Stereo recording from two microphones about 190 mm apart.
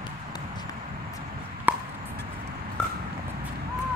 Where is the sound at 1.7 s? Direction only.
10° right (ahead or behind).